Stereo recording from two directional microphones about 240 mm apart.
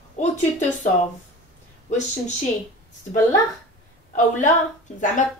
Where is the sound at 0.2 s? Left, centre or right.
Left.